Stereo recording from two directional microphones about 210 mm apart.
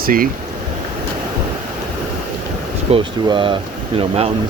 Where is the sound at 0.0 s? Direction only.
45° right (ahead or behind).